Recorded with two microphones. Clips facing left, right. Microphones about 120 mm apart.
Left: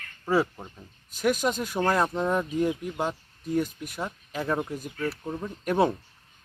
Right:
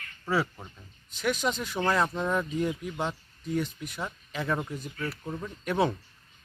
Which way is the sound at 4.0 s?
10° left (ahead or behind).